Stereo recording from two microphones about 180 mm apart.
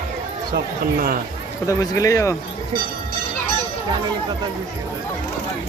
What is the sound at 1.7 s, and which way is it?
Speech, 20° left (ahead or behind).